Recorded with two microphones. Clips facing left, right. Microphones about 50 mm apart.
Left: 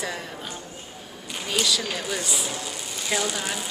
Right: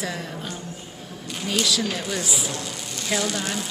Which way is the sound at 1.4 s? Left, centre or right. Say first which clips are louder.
Right 2 dB; centre.